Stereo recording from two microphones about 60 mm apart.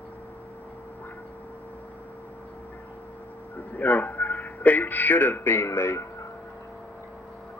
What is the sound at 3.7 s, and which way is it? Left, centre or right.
A man's voice, left.